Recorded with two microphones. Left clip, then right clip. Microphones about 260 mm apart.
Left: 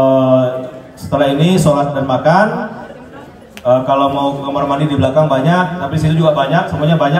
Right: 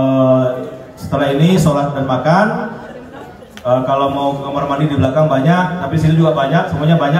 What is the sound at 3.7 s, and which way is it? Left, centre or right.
A man's voice, left.